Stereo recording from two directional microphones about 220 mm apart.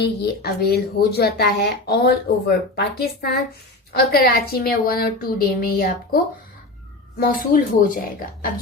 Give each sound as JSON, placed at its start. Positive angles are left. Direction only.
{"t": 0.0, "sound": "speech", "side_deg": 45}
{"t": 7.2, "sound": "speech", "side_deg": 40}